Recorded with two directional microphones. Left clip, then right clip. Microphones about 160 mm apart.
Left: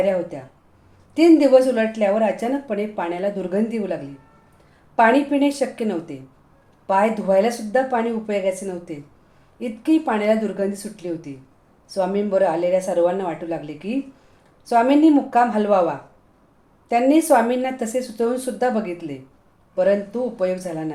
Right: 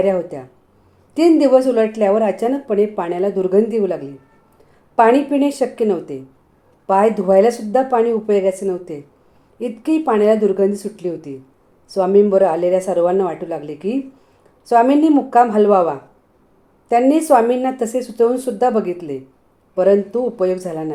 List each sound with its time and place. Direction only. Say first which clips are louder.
0.0 s speech: right 3 dB; 45° right (ahead or behind)